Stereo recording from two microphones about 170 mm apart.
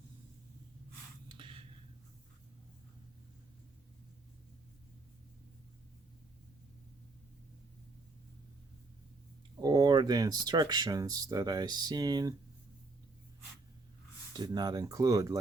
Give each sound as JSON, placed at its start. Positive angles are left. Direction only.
{"t": 1.3, "sound": "a sound", "side_deg": -30}
{"t": 9.6, "sound": "speech", "side_deg": -20}
{"t": 14.3, "sound": "speech", "side_deg": -25}